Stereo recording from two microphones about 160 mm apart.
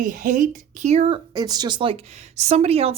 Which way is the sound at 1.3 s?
25° right (ahead or behind).